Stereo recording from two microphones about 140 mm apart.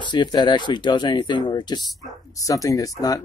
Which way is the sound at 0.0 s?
35° left (ahead or behind).